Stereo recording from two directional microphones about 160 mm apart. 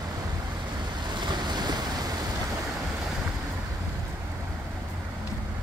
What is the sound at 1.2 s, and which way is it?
Waves, 30° right (ahead or behind).